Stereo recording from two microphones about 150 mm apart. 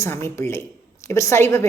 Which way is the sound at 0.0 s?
15° left (ahead or behind).